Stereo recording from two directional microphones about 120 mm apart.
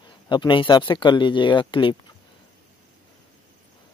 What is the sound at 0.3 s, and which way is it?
Speech, 40° left (ahead or behind).